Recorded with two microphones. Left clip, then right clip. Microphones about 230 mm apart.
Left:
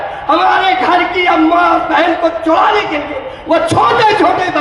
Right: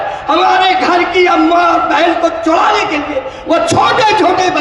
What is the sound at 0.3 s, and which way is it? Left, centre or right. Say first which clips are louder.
A man's voice: even; right.